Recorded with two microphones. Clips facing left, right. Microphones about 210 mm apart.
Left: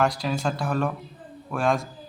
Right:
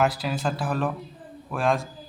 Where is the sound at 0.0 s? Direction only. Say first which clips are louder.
Even; 5° right (ahead or behind).